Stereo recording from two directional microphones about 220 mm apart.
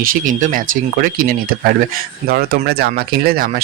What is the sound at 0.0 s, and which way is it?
Speech, 40° right (ahead or behind).